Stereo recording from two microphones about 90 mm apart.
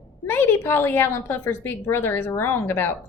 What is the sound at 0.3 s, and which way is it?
A woman's voice, 25° left (ahead or behind).